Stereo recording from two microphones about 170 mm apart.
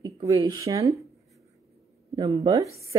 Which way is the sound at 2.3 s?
20° right (ahead or behind).